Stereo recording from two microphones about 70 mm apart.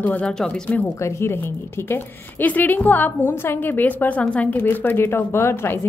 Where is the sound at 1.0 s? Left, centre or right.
Left.